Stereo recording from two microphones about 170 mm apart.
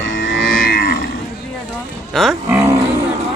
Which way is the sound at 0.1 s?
90° left.